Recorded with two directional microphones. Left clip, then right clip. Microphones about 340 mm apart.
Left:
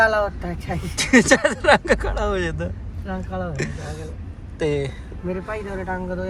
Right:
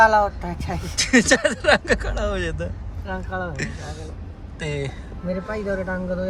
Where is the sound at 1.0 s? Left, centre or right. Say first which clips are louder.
Left 2 dB; centre.